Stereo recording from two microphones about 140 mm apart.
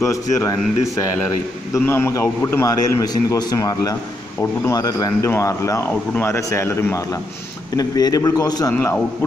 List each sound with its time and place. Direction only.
0.0 s a man's voice: 25° left (ahead or behind)
1.7 s a man's voice: 15° left (ahead or behind)
8.7 s a man's voice: 15° left (ahead or behind)